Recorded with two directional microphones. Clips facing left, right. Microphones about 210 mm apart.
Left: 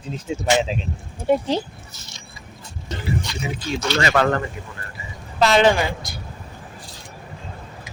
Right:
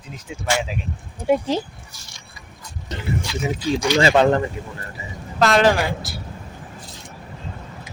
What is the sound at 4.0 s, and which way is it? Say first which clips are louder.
Speech: right 4 dB; 30° right (ahead or behind).